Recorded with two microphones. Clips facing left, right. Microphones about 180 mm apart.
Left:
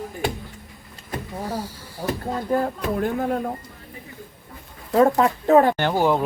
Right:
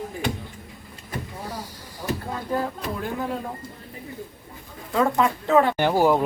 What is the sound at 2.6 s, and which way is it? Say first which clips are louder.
Speech: left 5 dB; 50° left (ahead or behind).